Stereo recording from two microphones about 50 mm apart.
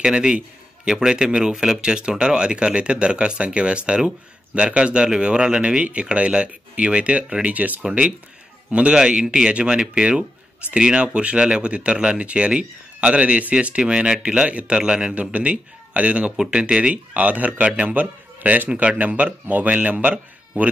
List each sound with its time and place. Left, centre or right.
0.0 s speech: centre
7.5 s speech: right